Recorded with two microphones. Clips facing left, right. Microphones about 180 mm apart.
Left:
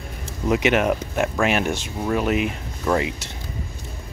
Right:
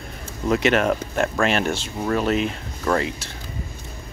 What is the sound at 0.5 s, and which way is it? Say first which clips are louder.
Speech: even; 15° left (ahead or behind).